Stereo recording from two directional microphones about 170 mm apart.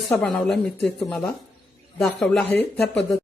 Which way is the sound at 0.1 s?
5° left (ahead or behind).